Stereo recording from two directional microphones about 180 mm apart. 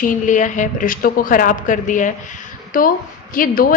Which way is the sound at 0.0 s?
45° left (ahead or behind).